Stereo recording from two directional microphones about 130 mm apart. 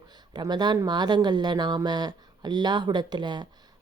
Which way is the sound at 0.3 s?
35° right (ahead or behind).